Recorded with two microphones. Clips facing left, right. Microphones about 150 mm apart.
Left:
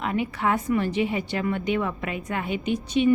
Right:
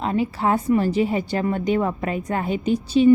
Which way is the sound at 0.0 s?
30° right (ahead or behind).